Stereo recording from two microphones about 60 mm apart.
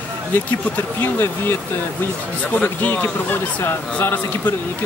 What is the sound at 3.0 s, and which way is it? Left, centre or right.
Speech, left.